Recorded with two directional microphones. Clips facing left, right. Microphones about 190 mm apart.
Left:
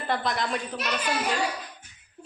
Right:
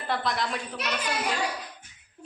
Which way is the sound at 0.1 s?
Centre (ahead or behind).